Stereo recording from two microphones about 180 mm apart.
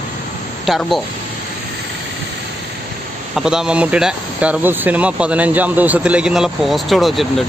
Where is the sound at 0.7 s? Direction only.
Centre (ahead or behind).